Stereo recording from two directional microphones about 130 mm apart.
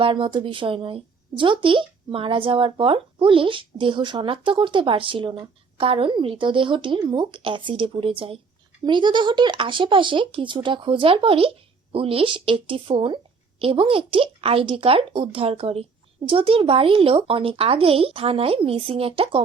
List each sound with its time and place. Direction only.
0.0 s speech: 40° right (ahead or behind)